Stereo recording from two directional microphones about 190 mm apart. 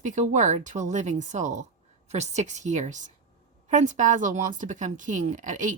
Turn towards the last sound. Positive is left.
turn(degrees=-40)  # may be behind; listen again after turning